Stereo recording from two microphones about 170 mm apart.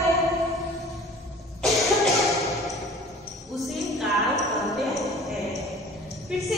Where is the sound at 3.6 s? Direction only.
Centre (ahead or behind).